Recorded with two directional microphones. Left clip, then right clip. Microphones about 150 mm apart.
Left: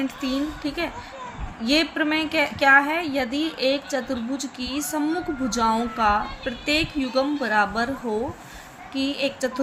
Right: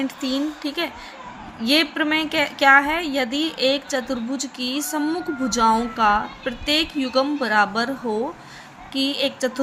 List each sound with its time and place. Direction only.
0.0 s a woman's voice: 20° right (ahead or behind)